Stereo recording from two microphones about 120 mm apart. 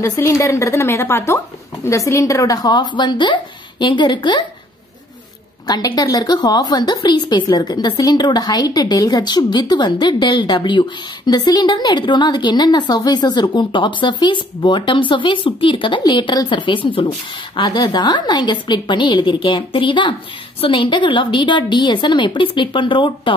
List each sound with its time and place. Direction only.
0.0 s a woman's voice: 25° left (ahead or behind); by 4.5 s 40° left (ahead or behind)
5.7 s a woman's voice: 35° left (ahead or behind)